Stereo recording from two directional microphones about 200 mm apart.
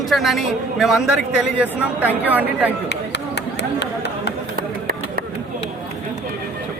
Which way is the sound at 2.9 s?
60° left (ahead or behind).